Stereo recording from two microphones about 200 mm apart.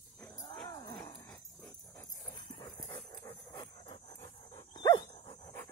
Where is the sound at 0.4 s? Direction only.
20° left (ahead or behind).